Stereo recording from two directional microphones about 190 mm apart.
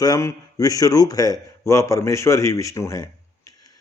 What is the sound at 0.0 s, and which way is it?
A man's voice, 15° left (ahead or behind).